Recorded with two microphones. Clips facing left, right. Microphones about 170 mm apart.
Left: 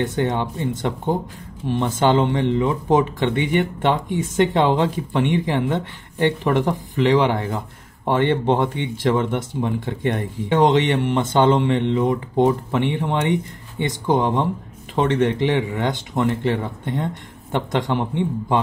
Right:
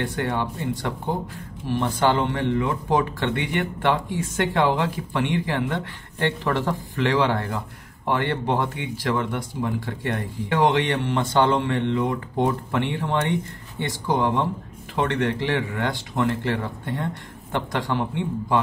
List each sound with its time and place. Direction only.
0.0 s speech: 20° left (ahead or behind)